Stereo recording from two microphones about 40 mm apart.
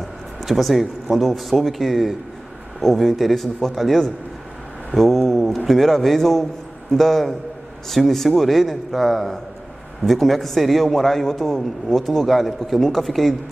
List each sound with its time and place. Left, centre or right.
0.5 s a man's voice: centre